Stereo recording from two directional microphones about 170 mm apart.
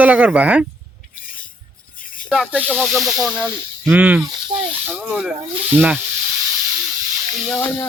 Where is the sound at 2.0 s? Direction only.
55° left (ahead or behind).